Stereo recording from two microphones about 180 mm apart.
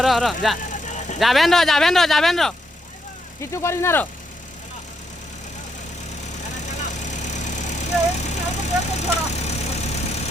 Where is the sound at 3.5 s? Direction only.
15° left (ahead or behind).